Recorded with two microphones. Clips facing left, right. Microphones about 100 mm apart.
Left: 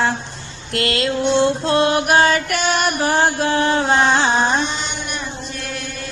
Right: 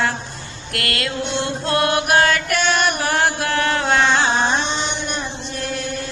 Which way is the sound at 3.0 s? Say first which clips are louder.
Left 3 dB; 25° left (ahead or behind).